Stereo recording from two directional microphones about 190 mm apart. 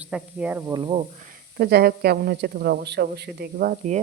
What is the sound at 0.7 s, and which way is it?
Speech, 25° right (ahead or behind).